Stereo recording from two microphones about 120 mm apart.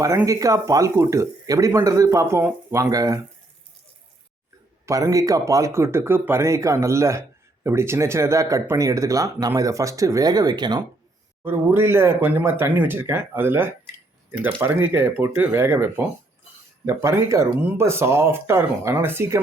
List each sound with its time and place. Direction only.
0.3 s speech: 30° right (ahead or behind)
4.9 s speech: 30° right (ahead or behind)
11.4 s speech: 20° right (ahead or behind)